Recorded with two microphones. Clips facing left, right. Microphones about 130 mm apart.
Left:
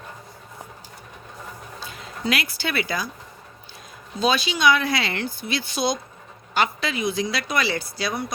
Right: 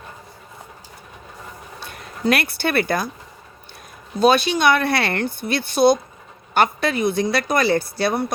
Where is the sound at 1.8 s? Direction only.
55° right (ahead or behind).